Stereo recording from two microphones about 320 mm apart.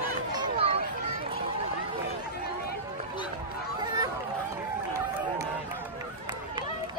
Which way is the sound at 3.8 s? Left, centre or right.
Centre.